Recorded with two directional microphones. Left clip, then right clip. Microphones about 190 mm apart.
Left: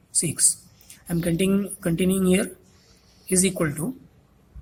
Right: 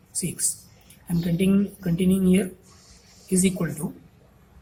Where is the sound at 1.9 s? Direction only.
55° left (ahead or behind).